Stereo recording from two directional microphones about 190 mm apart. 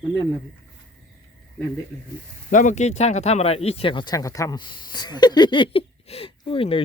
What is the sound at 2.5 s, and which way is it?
A man's voice, 40° left (ahead or behind).